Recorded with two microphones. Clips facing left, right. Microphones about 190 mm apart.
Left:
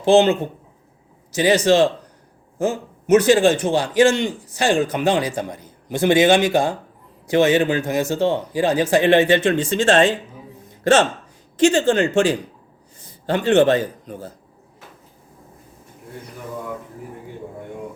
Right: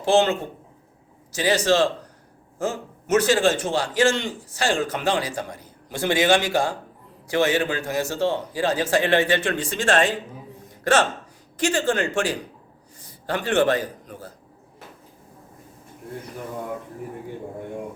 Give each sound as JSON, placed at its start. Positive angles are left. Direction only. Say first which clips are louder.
{"t": 0.0, "sound": "a man's voice", "louder": "left 5 dB", "side_deg": 20}